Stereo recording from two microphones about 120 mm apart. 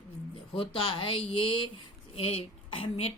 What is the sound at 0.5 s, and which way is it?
Speech, 45° left (ahead or behind).